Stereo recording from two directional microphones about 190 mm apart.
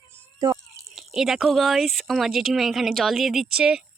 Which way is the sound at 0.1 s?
20° right (ahead or behind).